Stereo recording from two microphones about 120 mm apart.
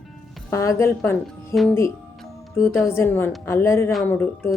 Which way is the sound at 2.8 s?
20° left (ahead or behind).